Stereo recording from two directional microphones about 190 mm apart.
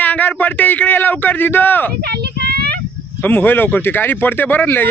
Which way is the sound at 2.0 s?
60° right (ahead or behind).